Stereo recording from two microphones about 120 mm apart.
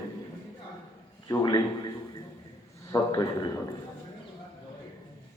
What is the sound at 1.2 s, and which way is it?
Speech, 35° left (ahead or behind).